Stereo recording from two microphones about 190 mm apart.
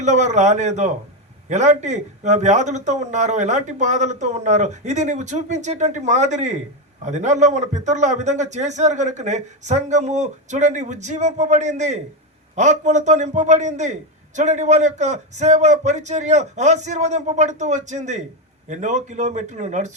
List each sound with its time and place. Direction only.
0.0 s a man's voice: 40° right (ahead or behind)